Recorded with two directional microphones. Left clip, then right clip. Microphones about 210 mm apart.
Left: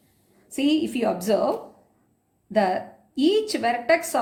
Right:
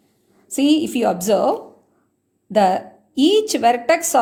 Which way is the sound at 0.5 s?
45° right (ahead or behind).